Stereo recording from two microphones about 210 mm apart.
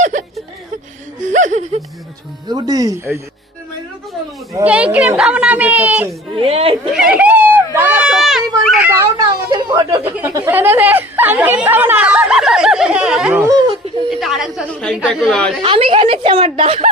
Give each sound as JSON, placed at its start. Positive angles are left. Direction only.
{"t": 0.0, "sound": "chuckle", "side_deg": -35}
{"t": 1.2, "sound": "a sound", "side_deg": -35}
{"t": 2.5, "sound": "a woman's voice", "side_deg": -20}
{"t": 4.5, "sound": "a woman's voice", "side_deg": -5}
{"t": 6.3, "sound": "a woman's voice", "side_deg": -25}
{"t": 7.1, "sound": "a sound", "side_deg": -5}
{"t": 9.5, "sound": "a woman's voice", "side_deg": -20}
{"t": 14.1, "sound": "a woman's voice", "side_deg": 0}
{"t": 15.6, "sound": "a woman's voice", "side_deg": -25}